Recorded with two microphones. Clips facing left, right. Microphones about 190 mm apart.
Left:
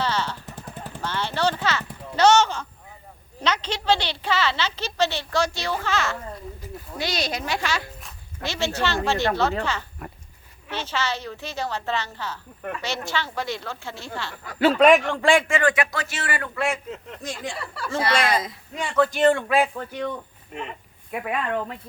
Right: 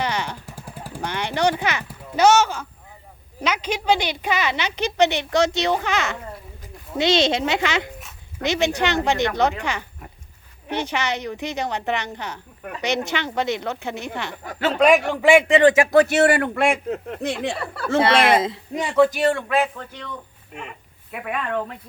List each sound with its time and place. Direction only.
0.0 s jackhammer: 15° right (ahead or behind)
3.4 s a woman's voice: 10° right (ahead or behind)
14.8 s a woman's voice: centre (ahead or behind); by 15.9 s 25° right (ahead or behind)
15.9 s a man's voice: 65° right (ahead or behind)
17.1 s a man's voice: 65° right (ahead or behind)
18.3 s speech: 25° right (ahead or behind)
19.3 s speech: 5° left (ahead or behind)